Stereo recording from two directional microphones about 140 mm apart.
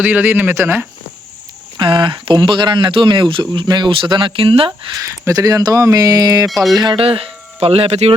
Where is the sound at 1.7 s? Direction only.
35° right (ahead or behind).